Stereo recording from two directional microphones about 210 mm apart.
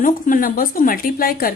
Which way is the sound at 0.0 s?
40° left (ahead or behind).